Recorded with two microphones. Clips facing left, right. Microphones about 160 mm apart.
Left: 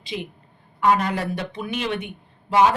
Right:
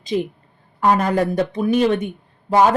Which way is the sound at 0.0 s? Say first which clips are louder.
Right 10 dB; 40° right (ahead or behind).